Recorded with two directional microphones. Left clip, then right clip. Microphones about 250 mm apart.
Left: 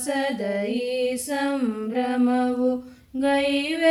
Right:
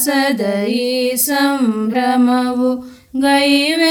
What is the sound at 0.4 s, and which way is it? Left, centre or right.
Music, centre.